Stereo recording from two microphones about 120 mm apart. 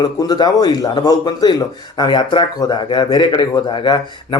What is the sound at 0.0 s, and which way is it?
A man's voice, 35° left (ahead or behind).